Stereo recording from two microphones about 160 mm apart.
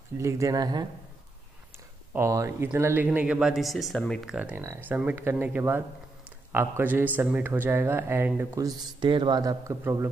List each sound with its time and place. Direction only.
0.2 s speech: 20° right (ahead or behind)
2.1 s a man's voice: 20° right (ahead or behind)